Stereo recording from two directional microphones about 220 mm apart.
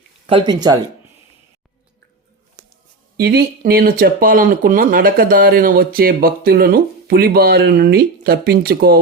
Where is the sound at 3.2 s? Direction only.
45° right (ahead or behind).